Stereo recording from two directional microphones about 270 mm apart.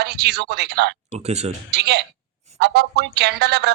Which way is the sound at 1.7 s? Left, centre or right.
Right.